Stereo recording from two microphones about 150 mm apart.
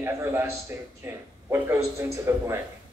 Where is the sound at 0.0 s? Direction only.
15° right (ahead or behind).